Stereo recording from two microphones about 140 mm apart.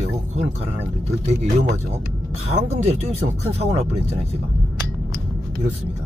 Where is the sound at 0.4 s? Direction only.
50° right (ahead or behind).